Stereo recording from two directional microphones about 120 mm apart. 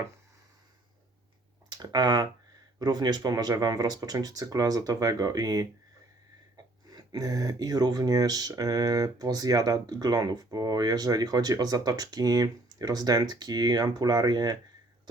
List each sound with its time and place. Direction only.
1.8 s speech: 35° right (ahead or behind)
6.9 s speech: 35° right (ahead or behind)